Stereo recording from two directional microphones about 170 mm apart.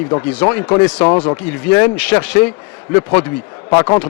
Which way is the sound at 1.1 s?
30° left (ahead or behind).